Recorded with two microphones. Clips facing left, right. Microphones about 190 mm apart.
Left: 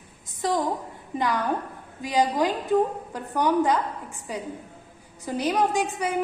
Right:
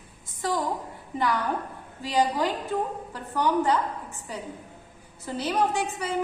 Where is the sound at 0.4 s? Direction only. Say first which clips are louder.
Left 3 dB; 20° left (ahead or behind).